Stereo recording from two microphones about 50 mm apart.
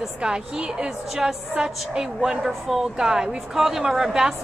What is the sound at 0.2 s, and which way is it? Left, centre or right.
A woman's voice, centre.